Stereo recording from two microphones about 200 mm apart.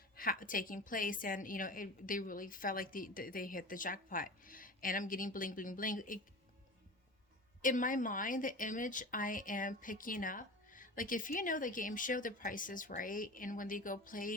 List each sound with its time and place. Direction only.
0.2 s a woman's voice: 45° left (ahead or behind)
7.6 s a woman's voice: 40° left (ahead or behind)